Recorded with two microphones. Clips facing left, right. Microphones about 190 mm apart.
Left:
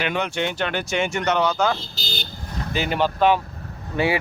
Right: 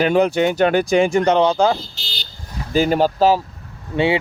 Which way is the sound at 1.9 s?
45° left (ahead or behind).